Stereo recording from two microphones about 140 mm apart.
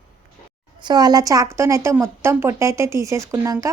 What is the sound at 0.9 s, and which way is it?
A woman's voice, 30° right (ahead or behind).